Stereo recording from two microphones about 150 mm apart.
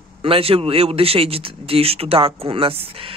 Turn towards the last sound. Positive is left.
turn(degrees=-40)  # may be behind; listen again after turning